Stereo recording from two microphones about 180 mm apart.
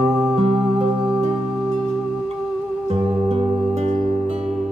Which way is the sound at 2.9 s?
30° right (ahead or behind).